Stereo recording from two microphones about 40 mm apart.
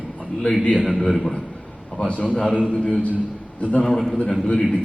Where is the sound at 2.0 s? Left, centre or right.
Left.